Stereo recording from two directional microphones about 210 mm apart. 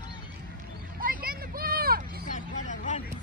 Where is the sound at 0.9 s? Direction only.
45° right (ahead or behind).